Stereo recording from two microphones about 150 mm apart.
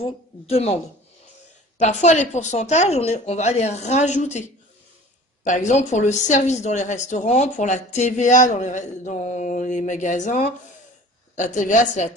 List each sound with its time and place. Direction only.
0.0 s speech: 40° left (ahead or behind)
1.8 s a woman's voice: 50° left (ahead or behind)